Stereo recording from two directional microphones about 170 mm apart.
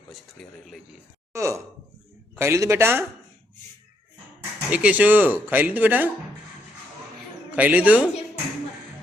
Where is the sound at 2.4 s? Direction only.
15° right (ahead or behind).